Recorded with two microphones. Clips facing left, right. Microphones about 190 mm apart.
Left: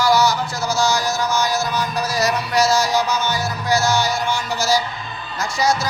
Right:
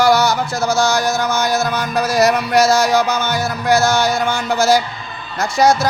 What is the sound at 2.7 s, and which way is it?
Music, 50° right (ahead or behind).